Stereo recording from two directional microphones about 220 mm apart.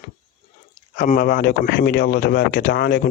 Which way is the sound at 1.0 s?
40° left (ahead or behind).